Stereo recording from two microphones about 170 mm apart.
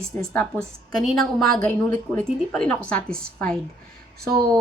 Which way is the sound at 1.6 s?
10° left (ahead or behind).